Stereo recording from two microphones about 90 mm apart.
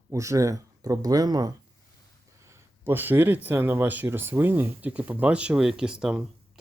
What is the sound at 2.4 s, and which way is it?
Speech, 25° right (ahead or behind).